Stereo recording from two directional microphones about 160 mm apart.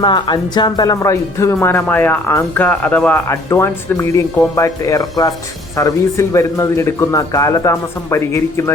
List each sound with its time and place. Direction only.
0.0 s speech: 30° left (ahead or behind)